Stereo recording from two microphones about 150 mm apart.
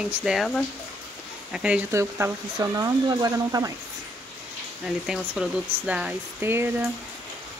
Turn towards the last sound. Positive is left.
turn(degrees=-15)  # may be behind; listen again after turning